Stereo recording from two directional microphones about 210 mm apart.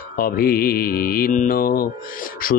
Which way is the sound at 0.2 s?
45° left (ahead or behind).